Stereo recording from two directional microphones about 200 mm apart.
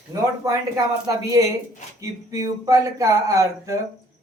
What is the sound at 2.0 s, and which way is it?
Speech, 15° right (ahead or behind).